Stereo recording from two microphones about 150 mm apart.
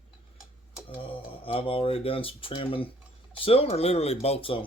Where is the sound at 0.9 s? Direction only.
40° left (ahead or behind).